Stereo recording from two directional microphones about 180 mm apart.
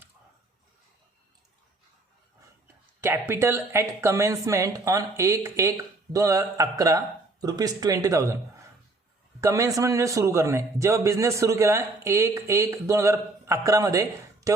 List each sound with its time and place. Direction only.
3.0 s a man's voice: 15° right (ahead or behind)
9.4 s a man's voice: 15° right (ahead or behind)